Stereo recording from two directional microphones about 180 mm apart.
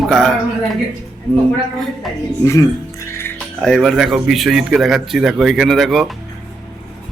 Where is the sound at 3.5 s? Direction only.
Centre (ahead or behind).